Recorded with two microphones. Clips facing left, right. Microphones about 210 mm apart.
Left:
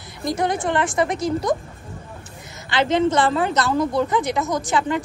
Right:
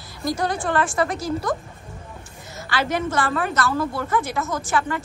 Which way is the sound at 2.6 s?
20° left (ahead or behind).